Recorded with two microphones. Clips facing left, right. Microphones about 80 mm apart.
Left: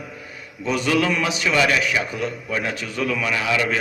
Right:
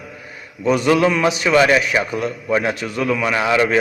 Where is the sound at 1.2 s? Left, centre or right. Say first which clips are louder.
Right 6 dB; right.